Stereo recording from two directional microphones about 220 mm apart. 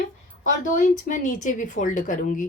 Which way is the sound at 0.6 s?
35° left (ahead or behind).